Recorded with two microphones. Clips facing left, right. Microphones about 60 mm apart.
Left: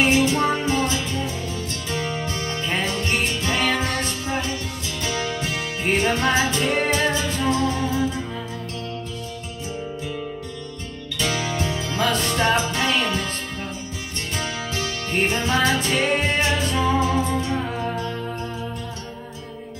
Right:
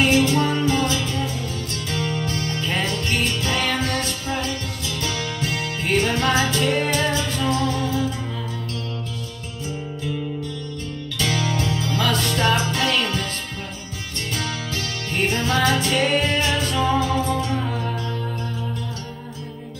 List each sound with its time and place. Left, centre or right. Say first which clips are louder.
0.0 s music: even; left
11.1 s music: right 1 dB; left
14.3 s music: even; left